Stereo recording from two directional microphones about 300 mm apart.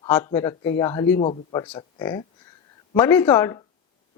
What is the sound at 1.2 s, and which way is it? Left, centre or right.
Speech, centre.